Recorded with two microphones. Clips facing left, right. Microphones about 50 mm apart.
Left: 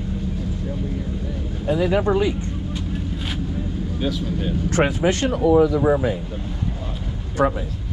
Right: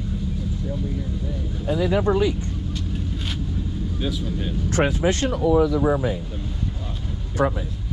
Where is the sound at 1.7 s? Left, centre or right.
Left.